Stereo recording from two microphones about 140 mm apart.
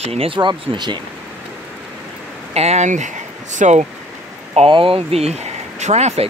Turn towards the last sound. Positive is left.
turn(degrees=-50)  # may be behind; listen again after turning